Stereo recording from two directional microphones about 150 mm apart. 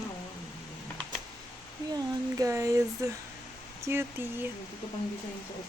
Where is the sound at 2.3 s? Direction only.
20° right (ahead or behind).